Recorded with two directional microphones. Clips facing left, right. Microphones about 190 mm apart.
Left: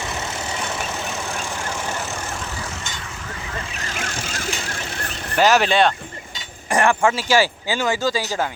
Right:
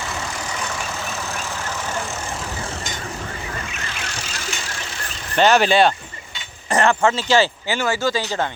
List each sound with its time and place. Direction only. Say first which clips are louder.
3.8 s vehicle: left 3 dB; 45° left (ahead or behind)
5.4 s speech: right 1 dB; 5° left (ahead or behind)
6.7 s speech: even; 10° left (ahead or behind)